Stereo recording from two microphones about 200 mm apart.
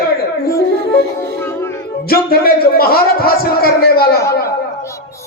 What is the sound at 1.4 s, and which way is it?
Music, 10° left (ahead or behind).